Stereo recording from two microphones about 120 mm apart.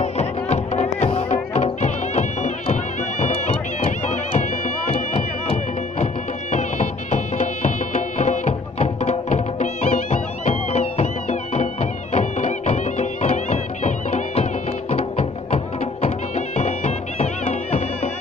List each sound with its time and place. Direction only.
0.0 s music: 70° left (ahead or behind)
4.9 s music: 65° left (ahead or behind)
6.5 s music: 80° left; by 18.1 s 65° left (ahead or behind)